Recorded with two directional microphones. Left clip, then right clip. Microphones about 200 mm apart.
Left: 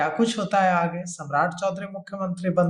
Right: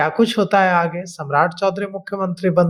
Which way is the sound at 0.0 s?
40° right (ahead or behind).